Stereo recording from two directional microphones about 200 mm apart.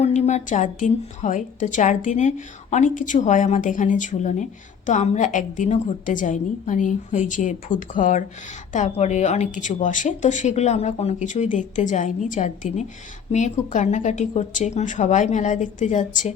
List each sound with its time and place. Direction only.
0.0 s a woman's voice: 35° left (ahead or behind)